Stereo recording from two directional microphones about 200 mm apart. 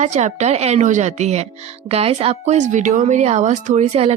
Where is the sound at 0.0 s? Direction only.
35° right (ahead or behind).